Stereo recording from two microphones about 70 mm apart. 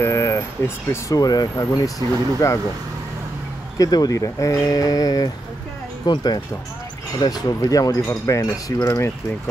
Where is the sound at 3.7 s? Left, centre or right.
Left.